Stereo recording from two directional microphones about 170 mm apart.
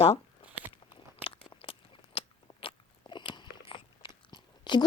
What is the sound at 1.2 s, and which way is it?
Biting, 35° left (ahead or behind).